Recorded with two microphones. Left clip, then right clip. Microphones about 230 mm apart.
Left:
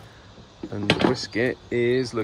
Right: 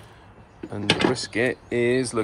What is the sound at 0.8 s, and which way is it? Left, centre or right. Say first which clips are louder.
Speech: even; left.